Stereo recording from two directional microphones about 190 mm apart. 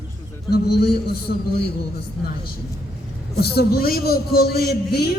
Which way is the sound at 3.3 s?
55° left (ahead or behind).